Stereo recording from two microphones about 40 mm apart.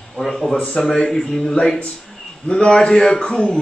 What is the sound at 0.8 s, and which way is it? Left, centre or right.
Speech, centre.